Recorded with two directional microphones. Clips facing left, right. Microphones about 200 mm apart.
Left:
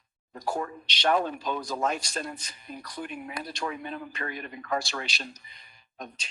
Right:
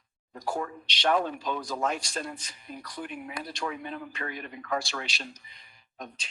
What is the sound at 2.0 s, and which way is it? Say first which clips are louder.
Speech: left 1 dB; 40° left (ahead or behind).